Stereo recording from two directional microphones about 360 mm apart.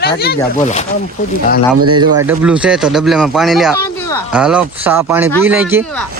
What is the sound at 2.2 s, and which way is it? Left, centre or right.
Speech, centre.